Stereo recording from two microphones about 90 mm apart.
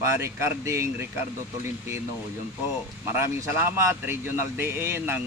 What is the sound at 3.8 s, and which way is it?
A man's voice, 30° right (ahead or behind).